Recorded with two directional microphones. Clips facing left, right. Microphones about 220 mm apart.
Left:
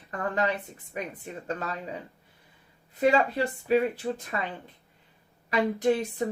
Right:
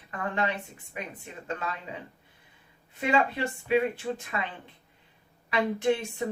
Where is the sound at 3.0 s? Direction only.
40° left (ahead or behind).